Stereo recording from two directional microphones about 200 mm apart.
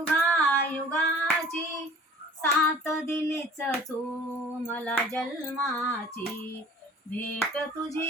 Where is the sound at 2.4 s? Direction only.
15° left (ahead or behind).